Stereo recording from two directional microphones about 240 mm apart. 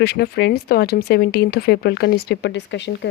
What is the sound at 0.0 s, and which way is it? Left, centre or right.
Speech, left.